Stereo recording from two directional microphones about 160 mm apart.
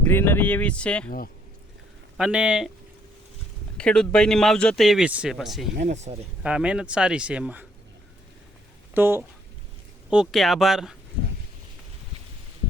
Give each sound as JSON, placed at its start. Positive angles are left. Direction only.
{"t": 0.1, "sound": "speech", "side_deg": 15}
{"t": 2.1, "sound": "speech", "side_deg": -5}
{"t": 3.8, "sound": "speech", "side_deg": 5}
{"t": 5.7, "sound": "speech", "side_deg": -50}
{"t": 6.4, "sound": "speech", "side_deg": -5}
{"t": 9.0, "sound": "speech", "side_deg": -15}
{"t": 10.1, "sound": "speech", "side_deg": 0}